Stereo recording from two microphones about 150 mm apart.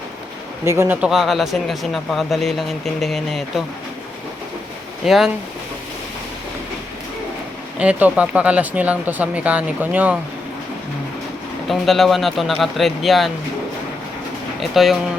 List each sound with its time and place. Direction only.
0.6 s speech: 15° right (ahead or behind)
1.0 s speech: centre (ahead or behind)
5.0 s speech: centre (ahead or behind)
7.8 s speech: 10° right (ahead or behind)
11.7 s speech: centre (ahead or behind)
14.6 s speech: centre (ahead or behind)